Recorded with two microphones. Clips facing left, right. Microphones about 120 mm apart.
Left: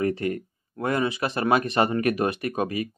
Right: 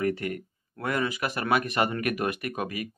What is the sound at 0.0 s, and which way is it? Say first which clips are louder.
Speech: left 3 dB; 30° left (ahead or behind).